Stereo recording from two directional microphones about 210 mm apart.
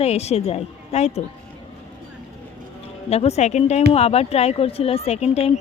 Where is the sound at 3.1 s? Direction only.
30° left (ahead or behind).